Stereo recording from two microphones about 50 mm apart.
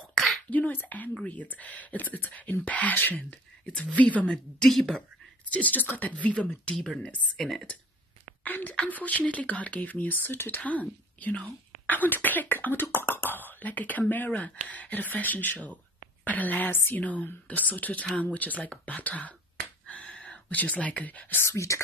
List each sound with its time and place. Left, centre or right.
0.1 s a sound: centre
0.5 s speech: left
4.3 s a woman's voice: centre
5.5 s speech: left
8.5 s a woman's voice: left
10.6 s speech: left
17.0 s speech: left
20.1 s a sound: left
20.4 s speech: left
21.4 s speech: left